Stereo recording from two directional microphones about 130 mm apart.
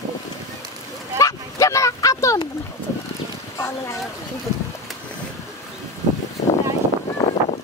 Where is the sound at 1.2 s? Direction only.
25° left (ahead or behind).